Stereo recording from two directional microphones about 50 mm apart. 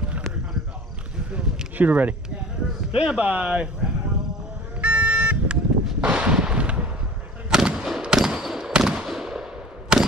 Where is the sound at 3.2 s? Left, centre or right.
Right.